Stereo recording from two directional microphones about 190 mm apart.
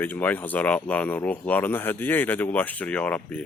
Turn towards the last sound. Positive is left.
turn(degrees=5)  # may be behind; listen again after turning